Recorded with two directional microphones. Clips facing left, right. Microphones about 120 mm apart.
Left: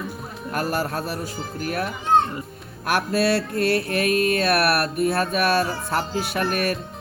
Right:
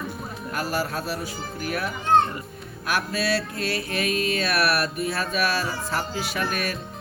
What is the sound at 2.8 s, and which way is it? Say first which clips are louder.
Mantra: left 5 dB; 55° left (ahead or behind).